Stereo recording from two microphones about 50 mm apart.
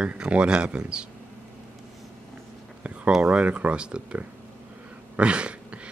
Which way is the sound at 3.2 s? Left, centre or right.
Right.